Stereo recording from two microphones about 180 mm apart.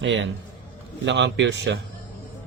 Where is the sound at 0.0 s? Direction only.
90° right.